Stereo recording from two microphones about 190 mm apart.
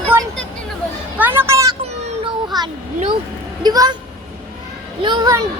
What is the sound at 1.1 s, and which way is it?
A woman's voice, 10° right (ahead or behind).